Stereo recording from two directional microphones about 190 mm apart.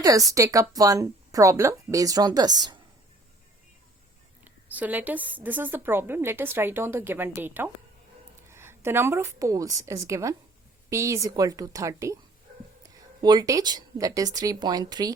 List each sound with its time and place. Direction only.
0.0 s a woman's voice: 20° right (ahead or behind)
4.4 s a woman's voice: 10° right (ahead or behind)